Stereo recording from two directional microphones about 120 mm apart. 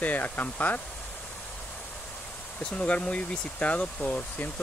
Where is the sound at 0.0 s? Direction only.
15° left (ahead or behind).